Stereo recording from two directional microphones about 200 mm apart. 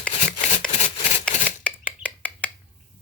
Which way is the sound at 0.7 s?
35° left (ahead or behind).